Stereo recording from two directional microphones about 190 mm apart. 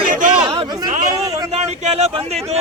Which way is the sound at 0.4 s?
25° right (ahead or behind).